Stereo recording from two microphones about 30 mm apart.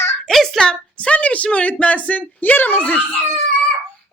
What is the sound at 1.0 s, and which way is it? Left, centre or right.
A woman's voice, left.